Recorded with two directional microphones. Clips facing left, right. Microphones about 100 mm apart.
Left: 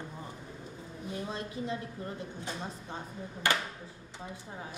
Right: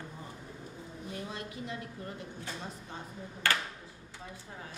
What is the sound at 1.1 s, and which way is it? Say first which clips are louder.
Speech: left 4 dB; 30° left (ahead or behind).